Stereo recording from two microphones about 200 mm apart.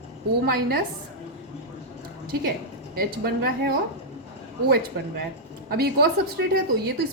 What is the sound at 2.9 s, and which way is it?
Speech, 50° right (ahead or behind).